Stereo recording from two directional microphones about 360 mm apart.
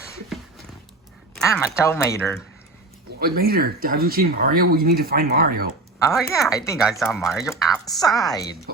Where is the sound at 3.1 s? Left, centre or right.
Right.